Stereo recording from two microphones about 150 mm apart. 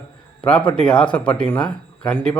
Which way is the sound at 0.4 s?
10° left (ahead or behind).